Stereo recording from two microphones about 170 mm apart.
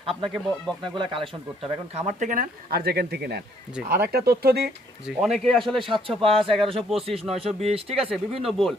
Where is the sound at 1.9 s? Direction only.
45° right (ahead or behind); by 4.7 s 65° right (ahead or behind).